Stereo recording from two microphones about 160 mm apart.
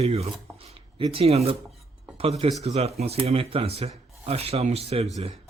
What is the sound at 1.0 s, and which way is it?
Speech, 35° right (ahead or behind).